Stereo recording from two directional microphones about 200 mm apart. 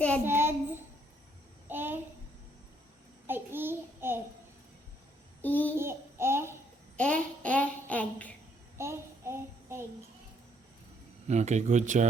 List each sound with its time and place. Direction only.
0.3 s child singing: 10° right (ahead or behind)
1.6 s a sound: 10° right (ahead or behind)
3.2 s child singing: 10° right (ahead or behind)
5.4 s a child's voice: 10° left (ahead or behind)
5.7 s a sound: 10° right (ahead or behind)
6.9 s child singing: 5° left (ahead or behind)
8.8 s child singing: 15° right (ahead or behind)
11.3 s speech: 35° right (ahead or behind)